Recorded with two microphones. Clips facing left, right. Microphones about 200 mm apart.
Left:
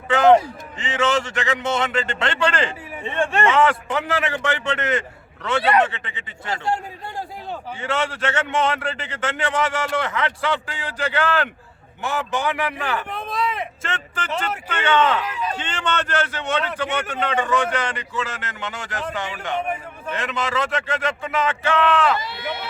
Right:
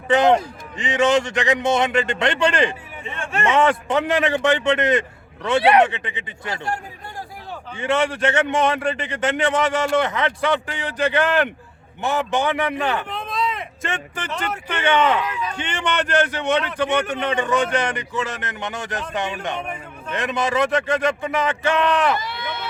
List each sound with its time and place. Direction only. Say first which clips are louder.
0.1 s speech: left 2 dB; 15° right (ahead or behind)
7.8 s a man's voice: right 5 dB; 15° right (ahead or behind)